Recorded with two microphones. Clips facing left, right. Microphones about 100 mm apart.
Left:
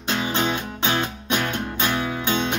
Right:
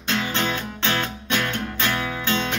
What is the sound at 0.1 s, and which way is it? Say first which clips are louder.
Music: left 1 dB; 20° left (ahead or behind).